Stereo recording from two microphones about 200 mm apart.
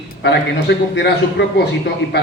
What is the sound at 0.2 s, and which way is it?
A man's voice, 60° left (ahead or behind).